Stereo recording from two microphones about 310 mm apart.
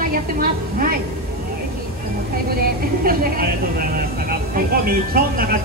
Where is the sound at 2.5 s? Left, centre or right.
Right.